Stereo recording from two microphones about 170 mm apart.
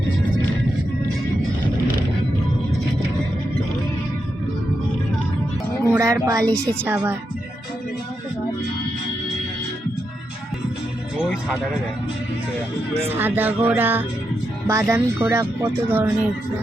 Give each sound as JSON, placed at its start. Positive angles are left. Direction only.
{"t": 5.9, "sound": "speech", "side_deg": -20}
{"t": 13.1, "sound": "speech", "side_deg": -10}